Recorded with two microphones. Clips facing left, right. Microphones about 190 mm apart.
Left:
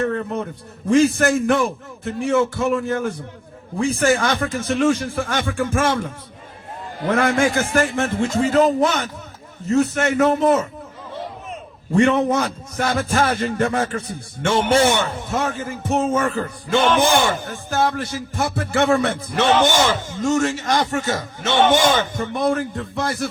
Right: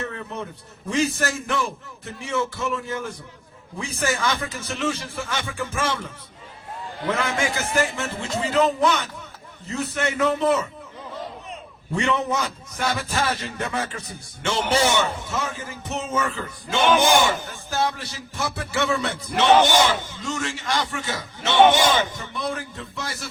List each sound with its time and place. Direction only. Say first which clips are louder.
0.0 s a man's voice: left 9 dB; 55° left (ahead or behind)
7.1 s a man's voice: left 7 dB; 55° left (ahead or behind)
11.9 s a man's voice: left 7 dB; 55° left (ahead or behind)